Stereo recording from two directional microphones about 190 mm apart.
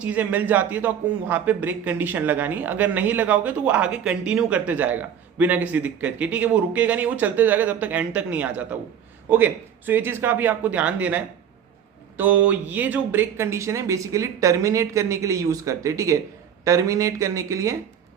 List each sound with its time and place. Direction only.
0.0 s a man's voice: 10° right (ahead or behind)